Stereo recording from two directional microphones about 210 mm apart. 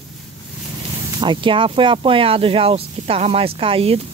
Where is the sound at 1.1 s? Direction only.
25° right (ahead or behind).